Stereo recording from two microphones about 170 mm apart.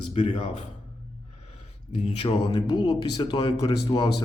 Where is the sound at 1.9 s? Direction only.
35° left (ahead or behind).